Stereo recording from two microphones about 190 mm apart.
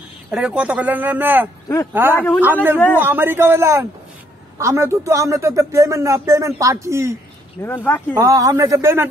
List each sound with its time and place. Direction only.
0.3 s speech: 5° right (ahead or behind)
7.6 s speech: 10° left (ahead or behind)
8.1 s speech: 15° right (ahead or behind)